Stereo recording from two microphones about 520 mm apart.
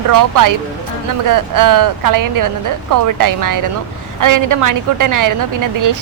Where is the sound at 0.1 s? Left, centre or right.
Right.